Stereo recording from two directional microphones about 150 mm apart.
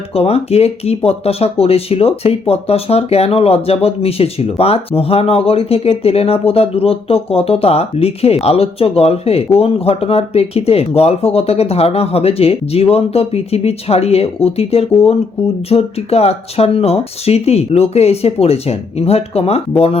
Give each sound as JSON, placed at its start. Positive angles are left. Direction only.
{"t": 0.1, "sound": "speech", "side_deg": 40}